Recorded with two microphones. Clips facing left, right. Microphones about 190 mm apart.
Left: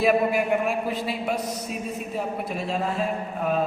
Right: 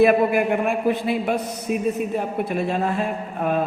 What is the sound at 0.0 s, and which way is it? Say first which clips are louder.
Mantra: right 5 dB; 55° right (ahead or behind).